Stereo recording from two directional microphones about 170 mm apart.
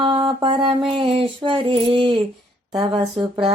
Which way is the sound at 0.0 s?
25° right (ahead or behind).